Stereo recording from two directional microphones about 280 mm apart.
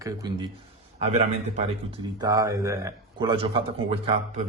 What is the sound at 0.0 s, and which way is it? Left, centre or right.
A man's voice, centre.